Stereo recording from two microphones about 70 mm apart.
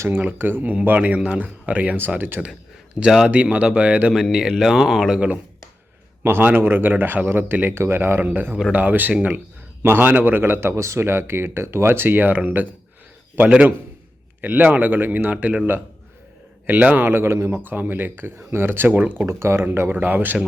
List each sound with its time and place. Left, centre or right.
0.0 s speech: right
3.0 s speech: centre
3.2 s speech: centre
4.1 s speech: centre
6.2 s speech: right
8.2 s speech: right
17.6 s speech: right
19.2 s speech: right